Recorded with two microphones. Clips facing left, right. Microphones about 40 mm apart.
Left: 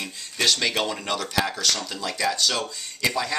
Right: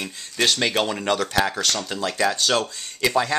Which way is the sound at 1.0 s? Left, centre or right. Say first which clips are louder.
Right 4 dB; right.